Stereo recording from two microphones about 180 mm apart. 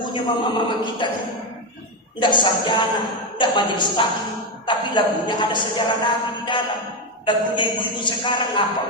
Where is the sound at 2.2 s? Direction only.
25° left (ahead or behind).